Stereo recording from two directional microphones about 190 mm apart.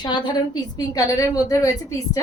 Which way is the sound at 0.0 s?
20° left (ahead or behind).